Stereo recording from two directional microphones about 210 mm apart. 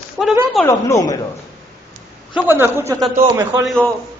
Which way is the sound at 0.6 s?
15° left (ahead or behind).